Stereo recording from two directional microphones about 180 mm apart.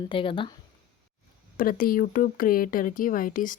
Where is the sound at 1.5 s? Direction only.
50° left (ahead or behind).